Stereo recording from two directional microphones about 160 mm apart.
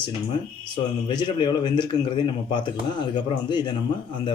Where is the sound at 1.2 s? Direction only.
30° left (ahead or behind).